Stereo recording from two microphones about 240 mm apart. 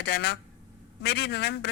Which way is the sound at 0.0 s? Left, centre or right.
Left.